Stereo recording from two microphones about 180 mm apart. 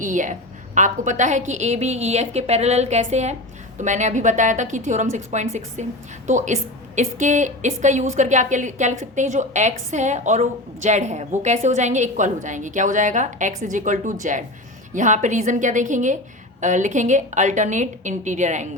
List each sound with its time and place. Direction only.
0.0 s a woman's voice: 45° right (ahead or behind)